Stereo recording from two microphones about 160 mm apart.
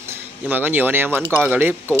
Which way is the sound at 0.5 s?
10° right (ahead or behind).